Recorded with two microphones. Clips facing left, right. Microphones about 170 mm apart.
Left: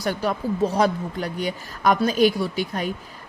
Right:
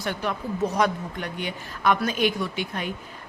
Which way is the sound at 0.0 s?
40° left (ahead or behind).